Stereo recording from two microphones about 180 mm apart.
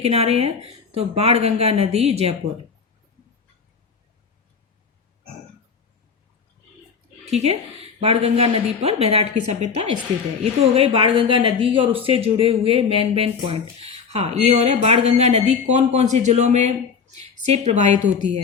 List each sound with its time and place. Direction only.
0.0 s speech: 35° right (ahead or behind)
7.3 s a woman's voice: 35° right (ahead or behind)